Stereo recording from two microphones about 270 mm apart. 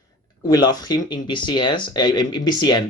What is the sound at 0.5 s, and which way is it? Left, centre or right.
Speech, centre.